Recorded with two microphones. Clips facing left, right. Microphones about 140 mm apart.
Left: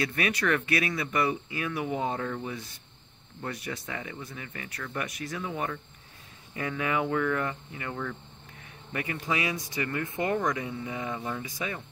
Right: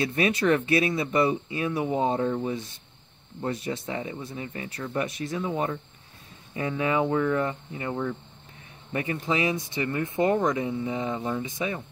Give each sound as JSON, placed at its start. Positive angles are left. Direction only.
{"t": 0.0, "sound": "speech", "side_deg": -25}
{"t": 6.8, "sound": "speech", "side_deg": -25}